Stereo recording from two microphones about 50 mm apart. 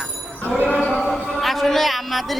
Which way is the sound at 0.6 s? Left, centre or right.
Left.